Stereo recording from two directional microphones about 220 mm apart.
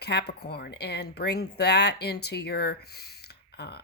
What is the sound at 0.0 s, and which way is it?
Speech, 50° left (ahead or behind).